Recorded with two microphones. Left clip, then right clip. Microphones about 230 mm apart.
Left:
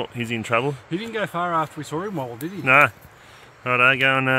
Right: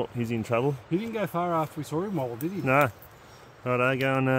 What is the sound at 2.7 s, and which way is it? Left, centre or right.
Speech, centre.